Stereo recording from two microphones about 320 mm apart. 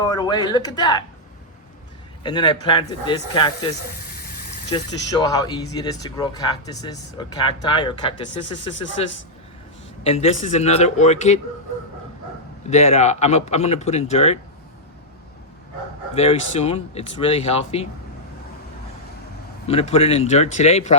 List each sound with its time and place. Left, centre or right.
0.0 s speech: centre
2.2 s speech: centre
4.7 s speech: centre
12.7 s speech: centre
16.1 s speech: centre
19.6 s speech: centre